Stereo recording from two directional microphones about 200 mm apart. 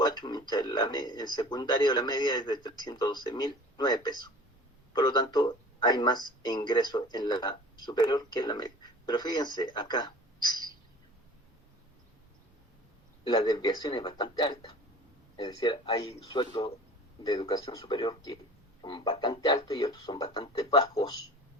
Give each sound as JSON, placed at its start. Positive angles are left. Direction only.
{"t": 0.0, "sound": "a man's voice", "side_deg": 20}
{"t": 13.2, "sound": "a man's voice", "side_deg": 20}